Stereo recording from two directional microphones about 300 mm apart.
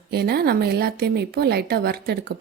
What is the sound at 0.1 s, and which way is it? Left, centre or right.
A woman's voice, right.